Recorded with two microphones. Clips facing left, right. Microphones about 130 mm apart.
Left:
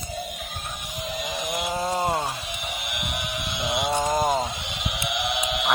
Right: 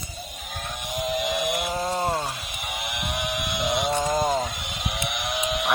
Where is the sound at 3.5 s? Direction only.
50° right (ahead or behind).